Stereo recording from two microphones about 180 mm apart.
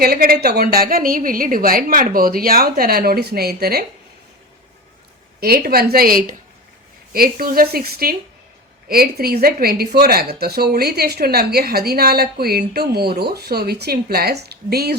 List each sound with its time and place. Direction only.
0.0 s speech: 55° right (ahead or behind)
5.4 s speech: 55° right (ahead or behind)